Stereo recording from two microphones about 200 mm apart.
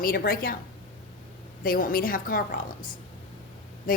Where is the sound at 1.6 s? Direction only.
45° left (ahead or behind).